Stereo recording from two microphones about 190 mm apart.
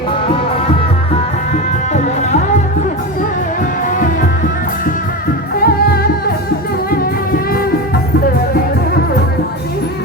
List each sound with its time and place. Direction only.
1.9 s music: 35° left (ahead or behind)
5.5 s music: 50° left (ahead or behind)